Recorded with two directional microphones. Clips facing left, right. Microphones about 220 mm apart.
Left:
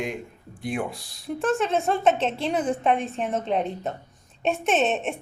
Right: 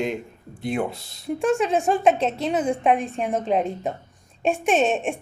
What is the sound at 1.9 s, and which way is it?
A woman's voice, 10° right (ahead or behind).